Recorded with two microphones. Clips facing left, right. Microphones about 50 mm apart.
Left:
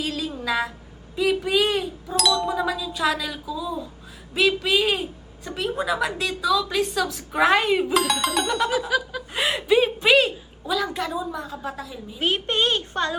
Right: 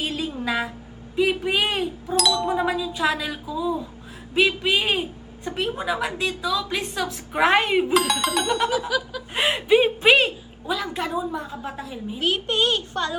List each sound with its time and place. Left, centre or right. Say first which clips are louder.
0.0 s a sound: right 1 dB; right
1.1 s a woman's voice: even; right
2.1 s a woman's voice: even; centre
2.6 s a woman's voice: right 1 dB; right
7.9 s a woman's voice: right 1 dB; centre
9.3 s a sound: right 2 dB; right
9.7 s a woman's voice: right 1 dB; right
12.2 s a woman's voice: even; centre